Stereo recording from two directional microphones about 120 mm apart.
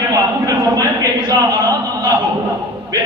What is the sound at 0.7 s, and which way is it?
A man's voice, 30° right (ahead or behind).